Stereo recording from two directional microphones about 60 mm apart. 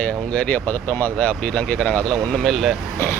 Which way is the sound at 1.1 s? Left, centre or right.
Centre.